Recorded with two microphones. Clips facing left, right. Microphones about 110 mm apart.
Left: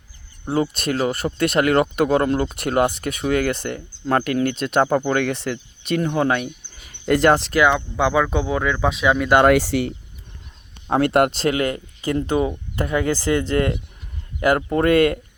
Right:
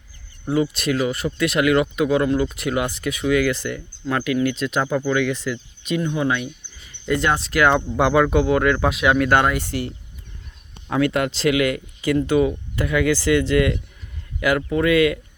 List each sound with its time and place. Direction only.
0.4 s speech: 40° left (ahead or behind); by 5.5 s 60° left (ahead or behind)
6.1 s speech: 45° left (ahead or behind)
7.5 s speech: 30° left (ahead or behind)
8.1 s speech: centre (ahead or behind)
9.5 s speech: 85° left
10.8 s speech: 40° left (ahead or behind)
11.1 s speech: 55° left (ahead or behind)
11.4 s speech: 35° left (ahead or behind)